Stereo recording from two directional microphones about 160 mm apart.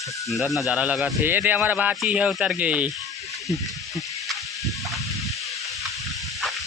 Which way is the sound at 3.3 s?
Centre (ahead or behind).